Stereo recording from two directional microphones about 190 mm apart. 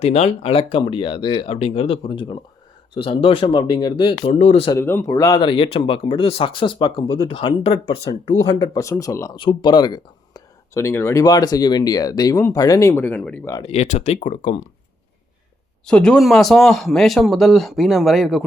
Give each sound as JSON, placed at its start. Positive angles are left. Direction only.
{"t": 0.0, "sound": "speech", "side_deg": 35}
{"t": 4.7, "sound": "speech", "side_deg": 10}
{"t": 13.6, "sound": "speech", "side_deg": 35}
{"t": 15.9, "sound": "speech", "side_deg": 5}